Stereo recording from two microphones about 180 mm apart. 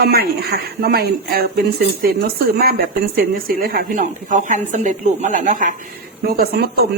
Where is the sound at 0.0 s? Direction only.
60° right (ahead or behind).